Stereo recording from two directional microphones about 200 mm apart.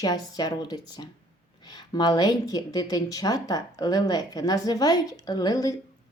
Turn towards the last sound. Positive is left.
turn(degrees=20)  # may be behind; listen again after turning